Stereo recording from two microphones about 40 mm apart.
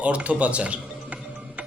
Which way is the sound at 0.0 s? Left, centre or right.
Right.